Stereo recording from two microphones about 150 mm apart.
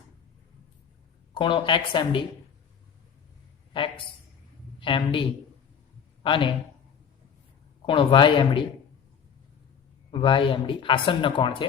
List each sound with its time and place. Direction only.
1.3 s speech: 35° left (ahead or behind)
3.7 s a woman's voice: 35° left (ahead or behind)
7.9 s speech: 35° left (ahead or behind)
10.1 s speech: 35° left (ahead or behind)